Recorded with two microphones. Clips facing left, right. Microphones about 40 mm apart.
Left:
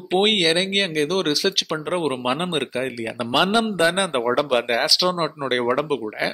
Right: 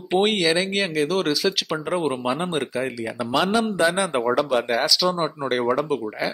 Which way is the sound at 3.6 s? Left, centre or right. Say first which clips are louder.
Left 1 dB; left.